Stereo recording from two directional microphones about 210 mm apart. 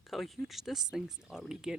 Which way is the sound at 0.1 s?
Centre (ahead or behind).